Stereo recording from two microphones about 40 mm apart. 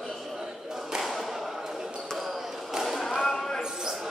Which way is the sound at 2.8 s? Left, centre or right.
Centre.